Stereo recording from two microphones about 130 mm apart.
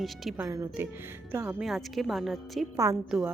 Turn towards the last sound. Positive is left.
turn(degrees=-5)  # may be behind; listen again after turning